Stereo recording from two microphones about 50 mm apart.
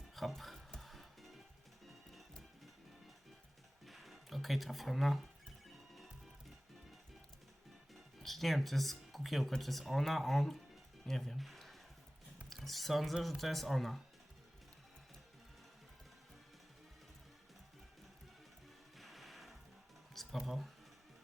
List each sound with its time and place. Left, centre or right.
0.2 s speech: centre
0.8 s music: centre
3.8 s speech: centre
7.9 s music: centre
9.5 s speech: centre
11.0 s a sound: centre
12.5 s speech: centre
18.9 s music: centre
20.2 s a sound: centre